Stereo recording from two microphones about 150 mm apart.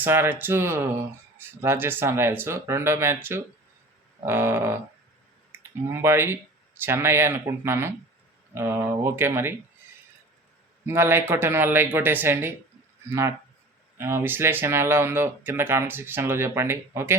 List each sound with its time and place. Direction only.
0.0 s speech: 15° right (ahead or behind)
10.8 s speech: 15° right (ahead or behind)